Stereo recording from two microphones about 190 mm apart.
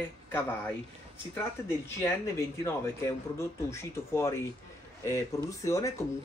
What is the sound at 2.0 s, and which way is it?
Speech, 15° left (ahead or behind).